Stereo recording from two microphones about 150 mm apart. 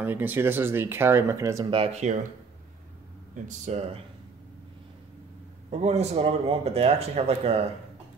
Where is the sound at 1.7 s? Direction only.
45° right (ahead or behind).